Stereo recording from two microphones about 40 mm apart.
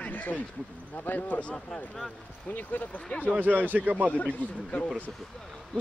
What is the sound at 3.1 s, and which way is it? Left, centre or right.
Speech, left.